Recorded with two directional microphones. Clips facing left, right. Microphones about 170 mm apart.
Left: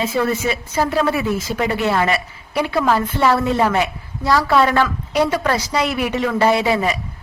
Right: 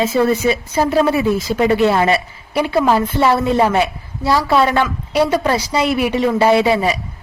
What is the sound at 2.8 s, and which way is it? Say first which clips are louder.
A woman's voice: right 3 dB; 15° right (ahead or behind).